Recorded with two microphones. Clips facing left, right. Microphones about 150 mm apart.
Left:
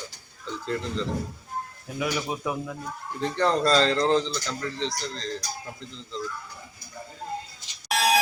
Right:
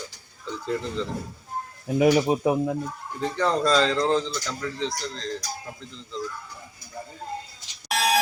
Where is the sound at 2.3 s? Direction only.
40° right (ahead or behind).